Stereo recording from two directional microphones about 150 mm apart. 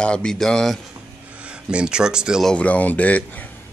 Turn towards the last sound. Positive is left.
turn(degrees=10)  # may be behind; listen again after turning